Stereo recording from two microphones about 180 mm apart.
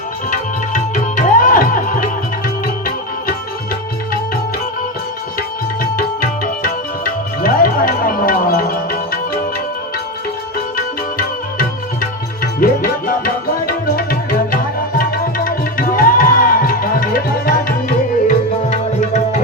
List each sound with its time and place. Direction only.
0.3 s music: 45° left (ahead or behind)
5.8 s music: 50° left (ahead or behind)
10.8 s music: 50° left (ahead or behind)
18.7 s music: 40° left (ahead or behind)